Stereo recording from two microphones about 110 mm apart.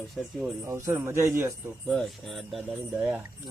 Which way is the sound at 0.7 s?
25° right (ahead or behind).